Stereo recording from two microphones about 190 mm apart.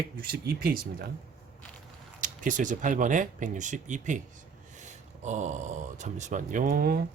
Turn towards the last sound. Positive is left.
turn(degrees=-50)  # may be behind; listen again after turning